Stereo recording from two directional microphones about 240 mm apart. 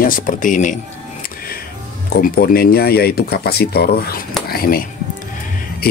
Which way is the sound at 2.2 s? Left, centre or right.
Left.